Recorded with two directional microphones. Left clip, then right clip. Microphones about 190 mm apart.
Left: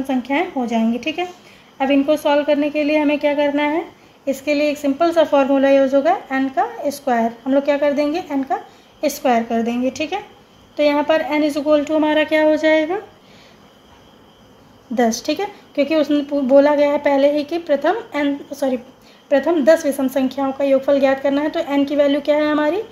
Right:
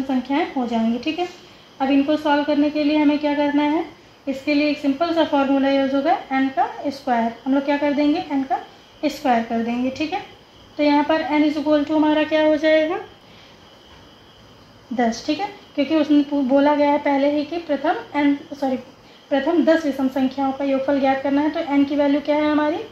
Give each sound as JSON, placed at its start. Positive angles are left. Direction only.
{"t": 0.3, "sound": "a woman's voice", "side_deg": 55}
{"t": 15.0, "sound": "a woman's voice", "side_deg": 65}